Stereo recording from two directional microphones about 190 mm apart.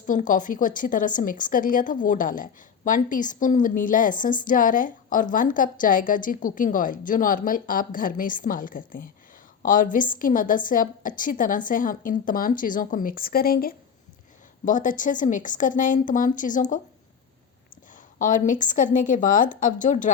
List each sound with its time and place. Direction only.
0.1 s a woman's voice: 45° left (ahead or behind)
18.2 s a woman's voice: 45° left (ahead or behind)